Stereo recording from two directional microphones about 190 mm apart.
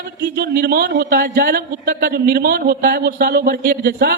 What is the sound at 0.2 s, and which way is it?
Speech, 60° right (ahead or behind).